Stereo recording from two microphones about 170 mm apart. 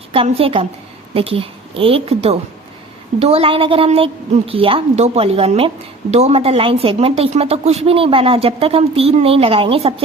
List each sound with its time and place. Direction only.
0.1 s a woman's voice: 35° right (ahead or behind)